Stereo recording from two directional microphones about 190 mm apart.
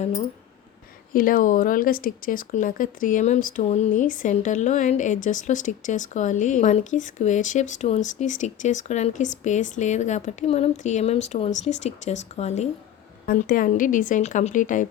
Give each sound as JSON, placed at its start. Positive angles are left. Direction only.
{"t": 1.1, "sound": "speech", "side_deg": 50}
{"t": 13.2, "sound": "a woman's voice", "side_deg": 50}